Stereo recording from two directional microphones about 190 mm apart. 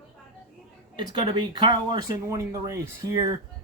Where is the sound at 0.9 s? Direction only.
25° right (ahead or behind).